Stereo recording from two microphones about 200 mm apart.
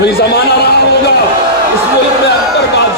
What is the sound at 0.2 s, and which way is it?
Speech, 55° left (ahead or behind).